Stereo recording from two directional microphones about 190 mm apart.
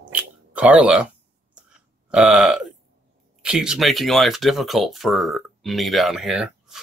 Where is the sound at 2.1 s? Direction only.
5° right (ahead or behind).